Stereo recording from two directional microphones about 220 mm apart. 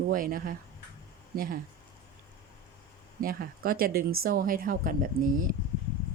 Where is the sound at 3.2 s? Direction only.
40° right (ahead or behind).